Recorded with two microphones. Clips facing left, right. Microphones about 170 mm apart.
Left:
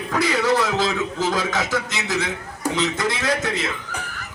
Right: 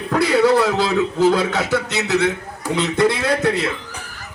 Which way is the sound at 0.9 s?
60° right (ahead or behind).